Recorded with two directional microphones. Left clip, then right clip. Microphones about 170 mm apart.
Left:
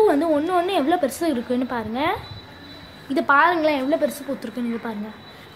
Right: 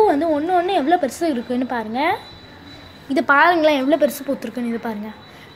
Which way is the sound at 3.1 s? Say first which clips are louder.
Right 3 dB; 15° right (ahead or behind).